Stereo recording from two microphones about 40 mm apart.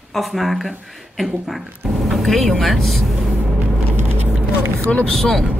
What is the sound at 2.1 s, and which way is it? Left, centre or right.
Speech, centre.